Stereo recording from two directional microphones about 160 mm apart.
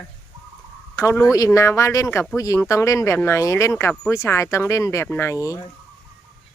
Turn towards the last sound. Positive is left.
turn(degrees=20)  # may be behind; listen again after turning